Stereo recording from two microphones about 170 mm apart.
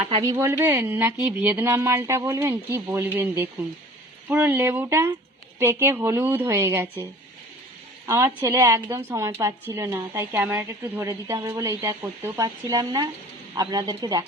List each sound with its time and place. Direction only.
0.1 s a woman's voice: 25° right (ahead or behind)
8.0 s a woman's voice: 15° right (ahead or behind)